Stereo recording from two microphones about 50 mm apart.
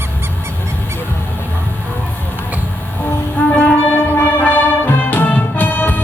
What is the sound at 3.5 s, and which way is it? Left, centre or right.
Music, left.